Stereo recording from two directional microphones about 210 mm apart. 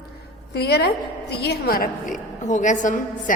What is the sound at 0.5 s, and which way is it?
A woman's voice, 50° left (ahead or behind).